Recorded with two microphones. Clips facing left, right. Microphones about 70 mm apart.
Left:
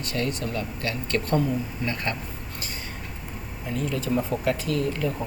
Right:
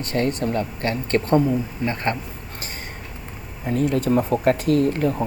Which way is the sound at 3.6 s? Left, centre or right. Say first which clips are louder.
Right 8 dB; right.